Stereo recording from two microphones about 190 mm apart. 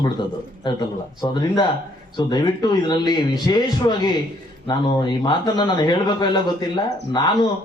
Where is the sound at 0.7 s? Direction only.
20° left (ahead or behind).